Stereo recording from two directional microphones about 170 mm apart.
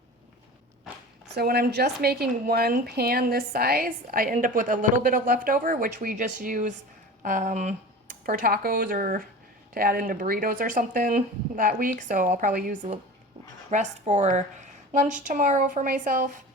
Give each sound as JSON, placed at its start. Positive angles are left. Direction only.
{"t": 1.4, "sound": "a woman's voice", "side_deg": -65}
{"t": 8.3, "sound": "a woman's voice", "side_deg": -55}
{"t": 13.7, "sound": "speech", "side_deg": -45}